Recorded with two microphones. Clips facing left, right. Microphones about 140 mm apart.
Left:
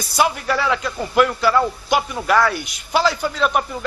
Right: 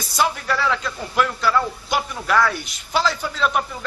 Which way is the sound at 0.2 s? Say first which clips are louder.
Left 2 dB; 5° left (ahead or behind).